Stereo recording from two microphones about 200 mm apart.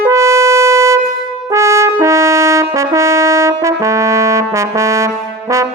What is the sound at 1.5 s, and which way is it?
Brass instrument, 15° right (ahead or behind).